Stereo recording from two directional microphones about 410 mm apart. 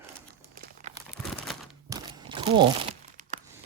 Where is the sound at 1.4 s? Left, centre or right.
Centre.